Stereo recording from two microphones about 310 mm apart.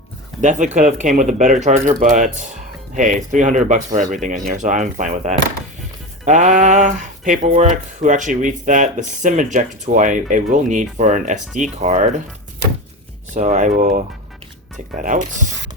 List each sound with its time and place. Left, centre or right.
0.4 s speech: right
13.3 s speech: right